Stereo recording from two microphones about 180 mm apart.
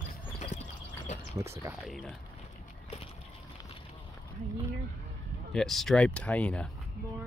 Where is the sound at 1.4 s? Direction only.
15° right (ahead or behind).